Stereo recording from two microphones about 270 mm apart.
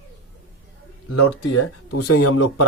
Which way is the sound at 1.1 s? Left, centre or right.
Left.